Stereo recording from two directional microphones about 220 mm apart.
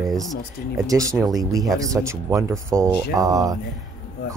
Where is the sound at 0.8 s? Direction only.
15° right (ahead or behind).